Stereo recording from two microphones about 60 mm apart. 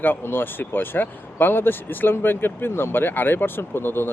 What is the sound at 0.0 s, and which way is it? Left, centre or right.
Speech, left.